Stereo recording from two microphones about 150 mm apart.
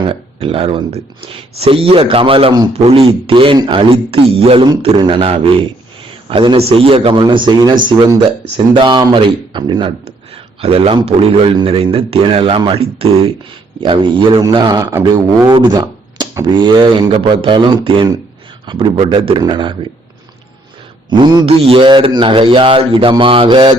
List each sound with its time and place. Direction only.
0.1 s a man's voice: 40° right (ahead or behind)
21.1 s speech: 30° right (ahead or behind)